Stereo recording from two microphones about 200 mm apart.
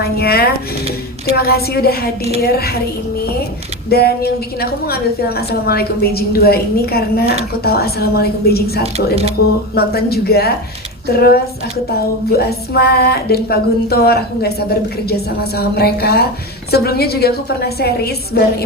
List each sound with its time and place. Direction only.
0.0 s speech: 50° left (ahead or behind)
3.8 s speech: 50° left (ahead or behind)
8.8 s speech: 30° right (ahead or behind)
9.7 s speech: 50° left (ahead or behind)